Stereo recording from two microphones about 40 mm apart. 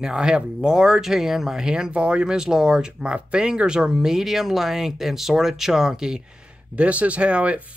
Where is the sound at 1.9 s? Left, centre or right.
Right.